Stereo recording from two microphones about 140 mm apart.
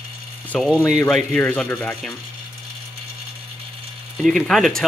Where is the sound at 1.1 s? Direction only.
10° left (ahead or behind).